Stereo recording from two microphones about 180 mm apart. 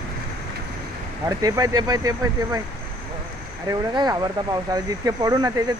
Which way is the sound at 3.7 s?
20° right (ahead or behind).